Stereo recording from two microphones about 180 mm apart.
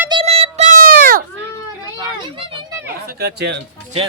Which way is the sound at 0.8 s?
55° right (ahead or behind).